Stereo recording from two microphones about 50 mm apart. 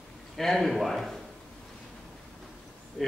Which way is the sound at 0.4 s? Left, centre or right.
Centre.